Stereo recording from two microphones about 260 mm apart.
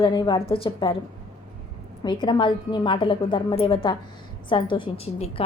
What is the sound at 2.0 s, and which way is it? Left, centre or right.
A woman's voice, centre.